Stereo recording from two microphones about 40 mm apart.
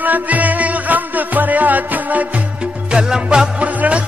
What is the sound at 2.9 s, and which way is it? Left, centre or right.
Music, right.